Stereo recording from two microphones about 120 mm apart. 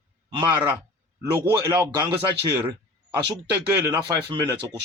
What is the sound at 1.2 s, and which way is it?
Speech, 25° right (ahead or behind).